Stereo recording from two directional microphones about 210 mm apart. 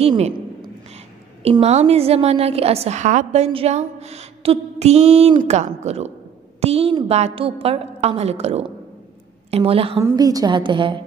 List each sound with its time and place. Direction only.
0.0 s a woman's voice: 25° right (ahead or behind)